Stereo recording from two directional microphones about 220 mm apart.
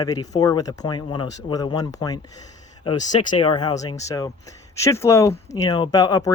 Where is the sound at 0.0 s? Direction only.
15° left (ahead or behind).